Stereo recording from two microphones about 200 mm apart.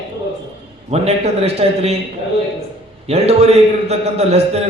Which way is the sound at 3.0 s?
30° right (ahead or behind).